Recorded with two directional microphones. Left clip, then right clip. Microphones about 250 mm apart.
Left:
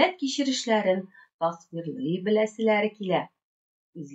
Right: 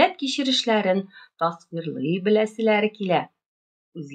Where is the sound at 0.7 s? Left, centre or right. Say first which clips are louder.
Right 2 dB; right.